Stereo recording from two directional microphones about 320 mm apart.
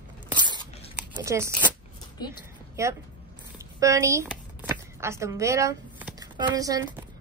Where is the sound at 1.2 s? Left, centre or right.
Centre.